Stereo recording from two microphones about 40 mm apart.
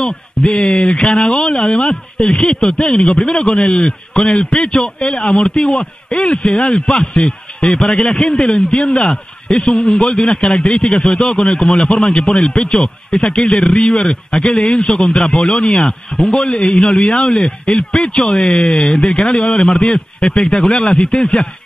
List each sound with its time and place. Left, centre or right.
0.0 s a man's voice: centre
15.9 s speech: centre
16.3 s a man's voice: left